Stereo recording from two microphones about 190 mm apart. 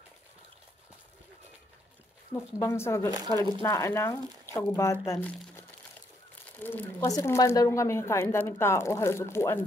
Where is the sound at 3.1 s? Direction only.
20° right (ahead or behind).